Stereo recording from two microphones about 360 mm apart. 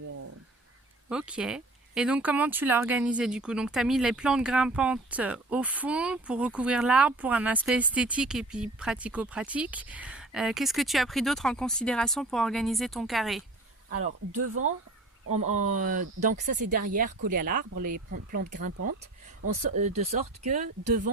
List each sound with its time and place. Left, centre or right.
1.1 s speech: centre
13.9 s speech: right
15.3 s speech: centre
19.7 s speech: centre